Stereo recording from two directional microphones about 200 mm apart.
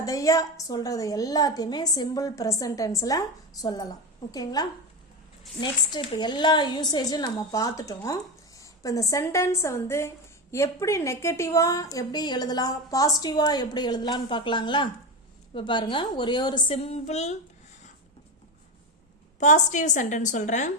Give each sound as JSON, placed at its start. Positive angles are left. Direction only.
{"t": 0.0, "sound": "a woman's voice", "side_deg": 15}
{"t": 19.4, "sound": "a woman's voice", "side_deg": 40}